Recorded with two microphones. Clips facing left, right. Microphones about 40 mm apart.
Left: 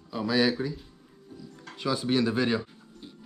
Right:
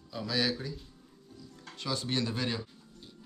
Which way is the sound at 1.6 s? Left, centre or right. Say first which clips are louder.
Left 6 dB; centre.